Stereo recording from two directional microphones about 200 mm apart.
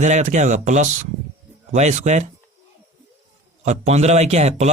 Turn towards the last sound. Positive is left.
turn(degrees=-35)  # may be behind; listen again after turning